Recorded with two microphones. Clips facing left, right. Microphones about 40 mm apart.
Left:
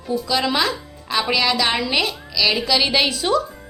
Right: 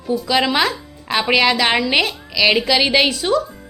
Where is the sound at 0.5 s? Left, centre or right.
Right.